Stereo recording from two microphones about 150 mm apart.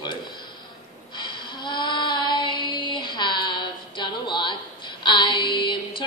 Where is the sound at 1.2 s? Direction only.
30° left (ahead or behind).